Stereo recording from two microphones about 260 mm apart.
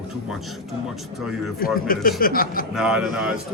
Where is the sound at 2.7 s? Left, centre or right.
Centre.